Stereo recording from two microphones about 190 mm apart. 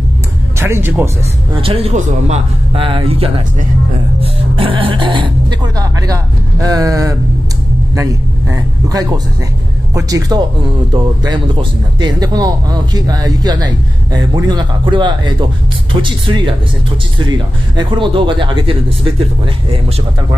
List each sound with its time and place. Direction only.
0.6 s speech: 10° right (ahead or behind)
1.6 s speech: 30° right (ahead or behind)